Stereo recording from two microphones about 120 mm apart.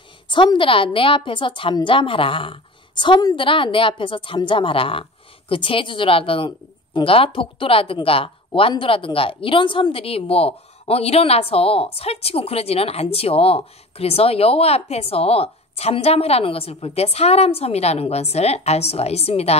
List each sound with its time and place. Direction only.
0.3 s speech: 40° left (ahead or behind); by 19.6 s 60° left (ahead or behind)